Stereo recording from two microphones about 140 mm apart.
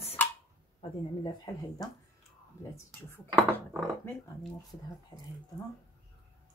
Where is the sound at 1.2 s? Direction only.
30° left (ahead or behind).